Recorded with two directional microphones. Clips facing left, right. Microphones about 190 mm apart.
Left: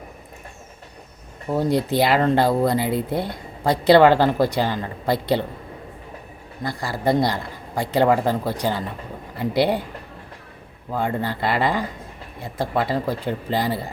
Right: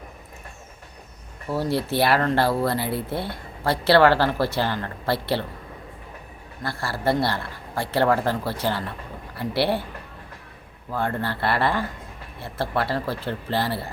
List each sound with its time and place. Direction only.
1.5 s speech: 20° left (ahead or behind)
6.6 s speech: 15° left (ahead or behind)
10.9 s speech: 15° left (ahead or behind)